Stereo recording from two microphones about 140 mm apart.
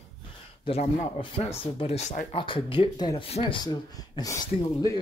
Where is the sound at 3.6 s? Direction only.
30° left (ahead or behind).